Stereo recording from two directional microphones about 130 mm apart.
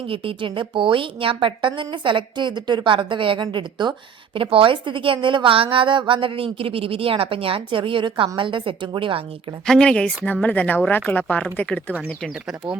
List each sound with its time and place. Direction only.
0.1 s a woman's voice: 45° right (ahead or behind)
9.6 s speech: 5° left (ahead or behind)
12.3 s speech: 5° right (ahead or behind)